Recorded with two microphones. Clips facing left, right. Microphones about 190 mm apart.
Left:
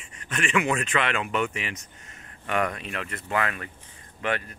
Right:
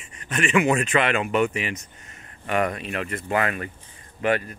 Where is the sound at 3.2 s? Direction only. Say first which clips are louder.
Right 3 dB; 45° right (ahead or behind).